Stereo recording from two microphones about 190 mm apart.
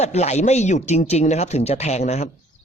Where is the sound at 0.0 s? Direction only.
35° left (ahead or behind).